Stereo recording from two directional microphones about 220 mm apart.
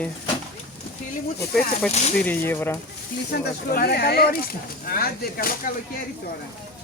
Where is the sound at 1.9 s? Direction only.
30° left (ahead or behind).